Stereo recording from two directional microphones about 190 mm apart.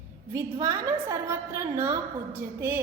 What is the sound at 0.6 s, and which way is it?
A woman's voice, 15° right (ahead or behind).